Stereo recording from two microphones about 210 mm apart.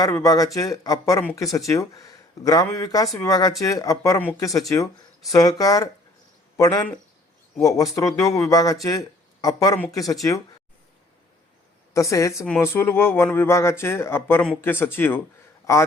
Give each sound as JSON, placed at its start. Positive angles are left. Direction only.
{"t": 0.0, "sound": "speech", "side_deg": 15}
{"t": 11.9, "sound": "speech", "side_deg": 15}